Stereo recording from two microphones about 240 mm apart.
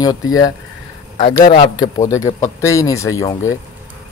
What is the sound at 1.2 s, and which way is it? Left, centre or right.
A man's voice, left.